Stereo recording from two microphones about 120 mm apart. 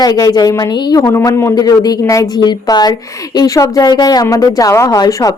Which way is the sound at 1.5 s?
30° left (ahead or behind).